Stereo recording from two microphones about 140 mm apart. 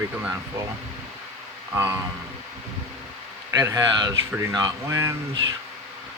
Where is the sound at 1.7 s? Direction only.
15° right (ahead or behind).